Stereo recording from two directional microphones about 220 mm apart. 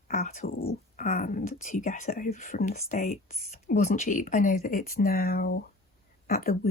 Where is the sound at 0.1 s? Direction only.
35° left (ahead or behind).